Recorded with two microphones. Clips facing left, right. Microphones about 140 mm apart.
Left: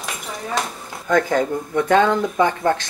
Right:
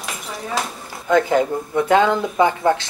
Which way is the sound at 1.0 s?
25° right (ahead or behind).